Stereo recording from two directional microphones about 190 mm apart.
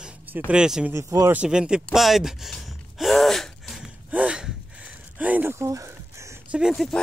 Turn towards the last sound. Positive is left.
turn(degrees=0)  # may be behind; listen again after turning